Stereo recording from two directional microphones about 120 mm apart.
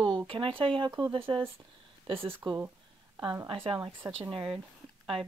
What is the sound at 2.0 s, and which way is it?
Speech, 50° right (ahead or behind).